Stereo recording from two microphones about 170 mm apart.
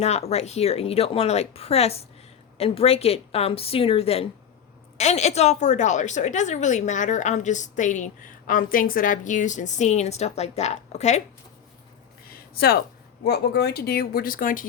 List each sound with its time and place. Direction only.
0.0 s a woman's voice: 40° left (ahead or behind)
12.3 s a sound: 65° left (ahead or behind)
13.2 s speech: 70° left (ahead or behind); by 14.7 s 55° left (ahead or behind)